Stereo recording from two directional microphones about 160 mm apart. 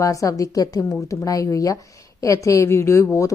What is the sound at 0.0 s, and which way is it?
A woman's voice, 20° left (ahead or behind).